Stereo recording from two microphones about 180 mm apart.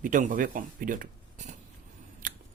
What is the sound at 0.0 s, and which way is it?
Speech, 45° right (ahead or behind).